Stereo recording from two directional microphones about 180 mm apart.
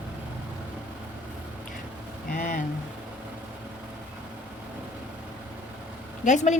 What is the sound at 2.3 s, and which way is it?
Speech, 45° left (ahead or behind).